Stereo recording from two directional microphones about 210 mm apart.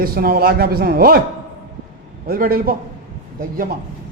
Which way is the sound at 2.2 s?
45° right (ahead or behind).